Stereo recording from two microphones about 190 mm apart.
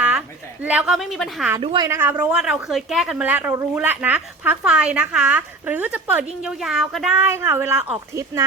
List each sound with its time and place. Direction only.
0.6 s speech: 5° right (ahead or behind)
1.6 s a woman's voice: 25° right (ahead or behind)
1.9 s a woman's voice: 10° right (ahead or behind)